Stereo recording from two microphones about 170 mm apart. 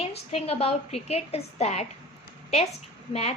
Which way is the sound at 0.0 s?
35° left (ahead or behind).